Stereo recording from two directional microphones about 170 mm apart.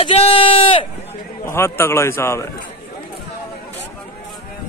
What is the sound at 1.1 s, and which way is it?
A man's voice, 15° left (ahead or behind).